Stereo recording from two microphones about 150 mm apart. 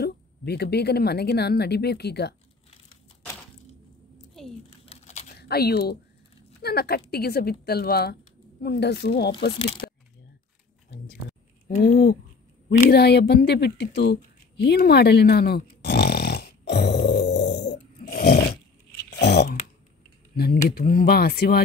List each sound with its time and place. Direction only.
0.0 s a woman's voice: 90° left
4.8 s crumpling: 50° left (ahead or behind)
5.3 s a woman's voice: 90° left
9.8 s a sound: 90° left
11.8 s speech: 65° left (ahead or behind)
12.9 s a woman's voice: 90° left
14.6 s a sound: 90° left
18.0 s roar: 90° left
19.0 s a sound: 90° left
20.3 s a woman's voice: 90° left